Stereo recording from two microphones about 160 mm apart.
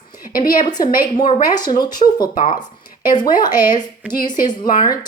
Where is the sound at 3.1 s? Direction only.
25° left (ahead or behind).